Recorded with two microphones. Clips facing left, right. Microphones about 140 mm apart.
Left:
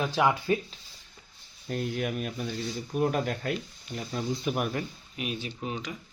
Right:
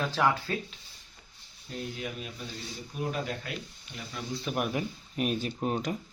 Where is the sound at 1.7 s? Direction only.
60° left (ahead or behind).